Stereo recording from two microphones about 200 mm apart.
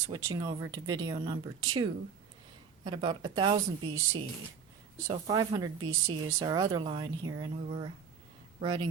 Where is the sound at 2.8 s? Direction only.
25° right (ahead or behind).